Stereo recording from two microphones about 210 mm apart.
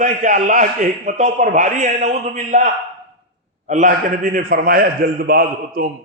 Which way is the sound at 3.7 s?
40° right (ahead or behind).